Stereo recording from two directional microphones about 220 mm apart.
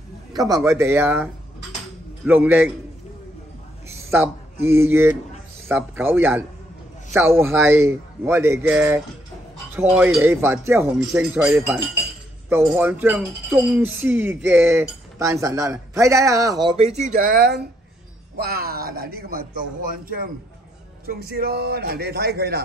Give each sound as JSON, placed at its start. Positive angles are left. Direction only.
{"t": 0.7, "sound": "speech", "side_deg": -10}
{"t": 3.9, "sound": "a man's voice", "side_deg": -10}